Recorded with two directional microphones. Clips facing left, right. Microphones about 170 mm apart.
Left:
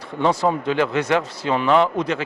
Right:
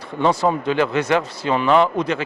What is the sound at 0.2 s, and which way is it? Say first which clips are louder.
Speech: right 1 dB; 15° right (ahead or behind).